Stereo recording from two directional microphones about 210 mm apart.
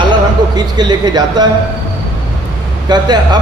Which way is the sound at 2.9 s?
20° right (ahead or behind).